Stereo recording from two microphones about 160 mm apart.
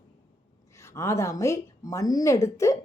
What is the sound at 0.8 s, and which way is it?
A woman's voice, 15° left (ahead or behind).